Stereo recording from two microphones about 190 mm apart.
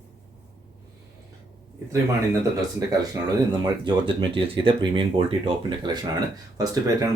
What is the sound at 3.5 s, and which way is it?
Speech, 25° right (ahead or behind).